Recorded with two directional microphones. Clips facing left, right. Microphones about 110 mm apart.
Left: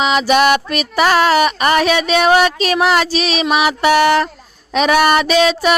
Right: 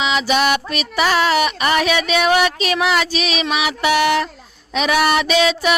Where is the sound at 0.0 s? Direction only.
45° left (ahead or behind).